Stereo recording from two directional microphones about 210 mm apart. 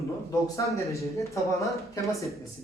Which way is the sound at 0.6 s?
15° left (ahead or behind).